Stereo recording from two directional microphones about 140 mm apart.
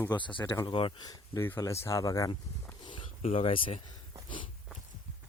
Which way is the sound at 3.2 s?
45° left (ahead or behind).